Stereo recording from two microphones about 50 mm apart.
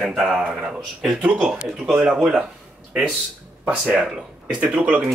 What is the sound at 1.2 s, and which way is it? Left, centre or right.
Speech, right.